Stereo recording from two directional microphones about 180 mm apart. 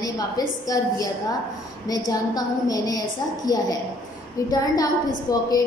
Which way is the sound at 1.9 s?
20° left (ahead or behind).